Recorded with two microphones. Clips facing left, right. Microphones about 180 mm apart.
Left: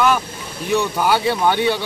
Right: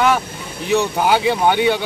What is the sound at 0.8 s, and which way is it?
Speech, 15° right (ahead or behind).